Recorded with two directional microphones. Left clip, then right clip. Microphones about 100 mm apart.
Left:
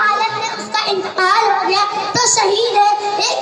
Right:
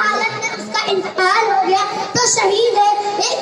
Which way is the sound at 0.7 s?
20° left (ahead or behind).